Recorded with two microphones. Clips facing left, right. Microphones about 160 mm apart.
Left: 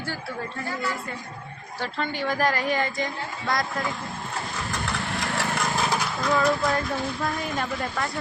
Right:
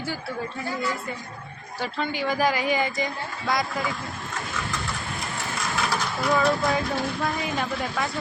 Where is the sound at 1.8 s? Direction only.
10° right (ahead or behind).